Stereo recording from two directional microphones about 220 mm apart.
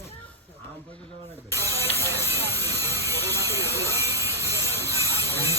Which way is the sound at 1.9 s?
10° left (ahead or behind).